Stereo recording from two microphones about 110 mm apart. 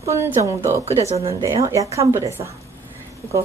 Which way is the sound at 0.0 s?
25° right (ahead or behind).